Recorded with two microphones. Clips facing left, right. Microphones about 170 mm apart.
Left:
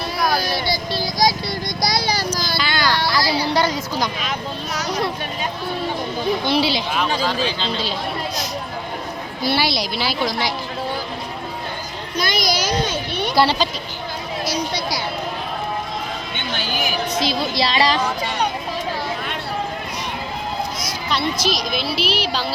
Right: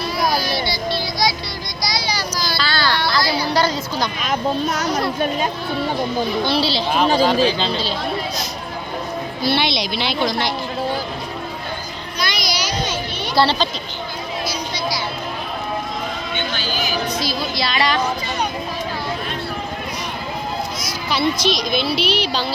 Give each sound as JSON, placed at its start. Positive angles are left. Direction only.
{"t": 0.3, "sound": "child singing", "side_deg": 50}
{"t": 1.8, "sound": "a sound", "side_deg": 55}
{"t": 2.6, "sound": "a sound", "side_deg": 15}
{"t": 3.2, "sound": "a sound", "side_deg": 30}
{"t": 4.2, "sound": "a child's voice", "side_deg": -45}
{"t": 6.5, "sound": "speech", "side_deg": 15}
{"t": 6.9, "sound": "speech", "side_deg": -35}
{"t": 9.5, "sound": "a woman's voice", "side_deg": 5}
{"t": 12.2, "sound": "a sound", "side_deg": 50}
{"t": 13.3, "sound": "speech", "side_deg": 10}
{"t": 16.6, "sound": "music", "side_deg": 55}
{"t": 17.2, "sound": "speech", "side_deg": 25}
{"t": 21.1, "sound": "a woman's voice", "side_deg": 0}